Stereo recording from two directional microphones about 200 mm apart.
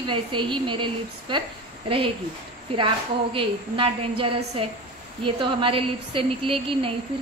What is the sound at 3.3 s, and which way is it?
A woman's voice, 25° right (ahead or behind).